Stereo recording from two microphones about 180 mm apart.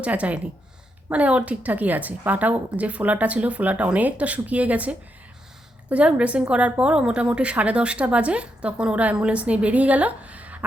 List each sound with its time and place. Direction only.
0.0 s a woman's voice: 10° right (ahead or behind)